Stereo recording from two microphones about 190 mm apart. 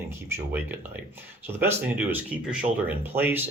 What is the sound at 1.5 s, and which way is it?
A man's voice, 10° right (ahead or behind).